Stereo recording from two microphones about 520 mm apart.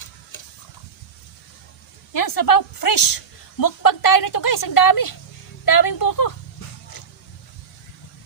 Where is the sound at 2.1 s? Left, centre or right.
Left.